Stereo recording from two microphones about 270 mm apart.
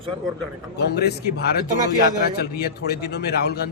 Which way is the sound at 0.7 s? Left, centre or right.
Left.